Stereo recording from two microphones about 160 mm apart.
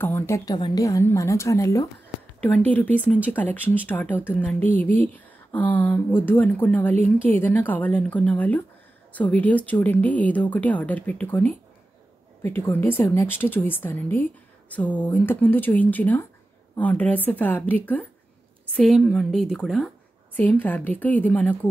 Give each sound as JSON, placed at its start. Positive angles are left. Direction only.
{"t": 0.0, "sound": "a woman's voice", "side_deg": 15}
{"t": 18.8, "sound": "a woman's voice", "side_deg": 0}